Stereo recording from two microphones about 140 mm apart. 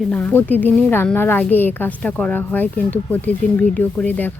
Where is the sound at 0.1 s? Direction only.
10° left (ahead or behind).